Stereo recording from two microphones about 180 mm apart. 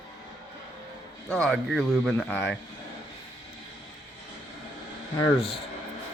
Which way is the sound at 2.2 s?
10° left (ahead or behind).